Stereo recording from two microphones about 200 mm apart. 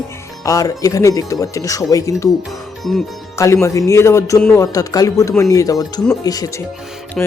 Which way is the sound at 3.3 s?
15° left (ahead or behind).